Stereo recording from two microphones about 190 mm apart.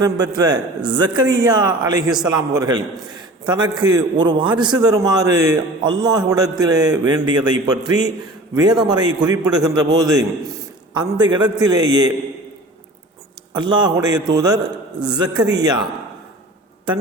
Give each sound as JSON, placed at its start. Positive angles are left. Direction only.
{"t": 0.0, "sound": "a man's voice", "side_deg": -20}
{"t": 2.0, "sound": "a man's voice", "side_deg": -5}
{"t": 2.6, "sound": "a man's voice", "side_deg": -20}
{"t": 13.5, "sound": "a man's voice", "side_deg": -25}
{"t": 14.9, "sound": "a man's voice", "side_deg": -5}
{"t": 15.2, "sound": "a man's voice", "side_deg": -20}